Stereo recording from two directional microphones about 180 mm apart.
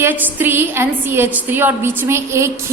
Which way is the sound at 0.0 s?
10° right (ahead or behind).